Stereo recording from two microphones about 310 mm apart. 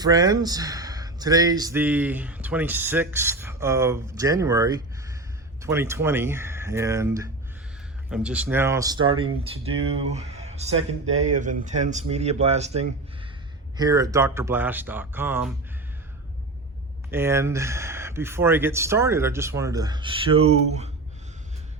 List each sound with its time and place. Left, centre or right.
0.0 s speech: centre
17.1 s speech: centre